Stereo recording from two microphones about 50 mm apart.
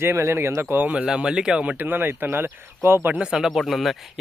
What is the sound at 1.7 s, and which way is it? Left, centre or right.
Speech, right.